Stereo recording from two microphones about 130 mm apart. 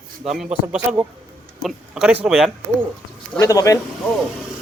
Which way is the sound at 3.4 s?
25° left (ahead or behind).